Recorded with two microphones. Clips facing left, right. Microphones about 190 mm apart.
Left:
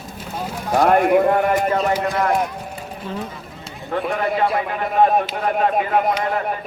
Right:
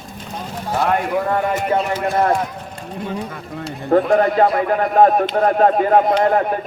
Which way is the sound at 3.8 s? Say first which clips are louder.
Right 8 dB; 40° right (ahead or behind).